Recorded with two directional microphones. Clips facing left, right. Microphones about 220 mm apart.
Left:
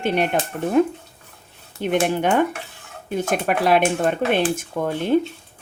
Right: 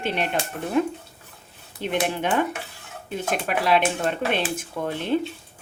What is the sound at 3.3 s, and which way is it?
A woman's voice, 50° left (ahead or behind).